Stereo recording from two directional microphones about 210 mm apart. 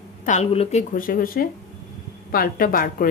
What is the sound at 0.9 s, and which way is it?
A woman's voice, 40° left (ahead or behind).